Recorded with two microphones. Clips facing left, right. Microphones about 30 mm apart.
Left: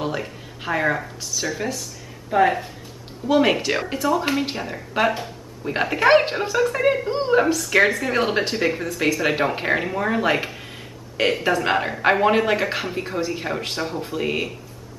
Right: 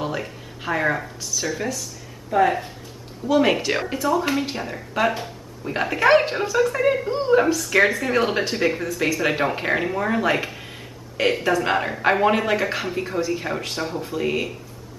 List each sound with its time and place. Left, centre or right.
0.0 s music: centre
2.3 s a woman's voice: left
3.5 s speech: centre
4.9 s a sound: centre
5.9 s a woman's voice: centre
7.1 s a woman's voice: left
7.3 s a woman's voice: centre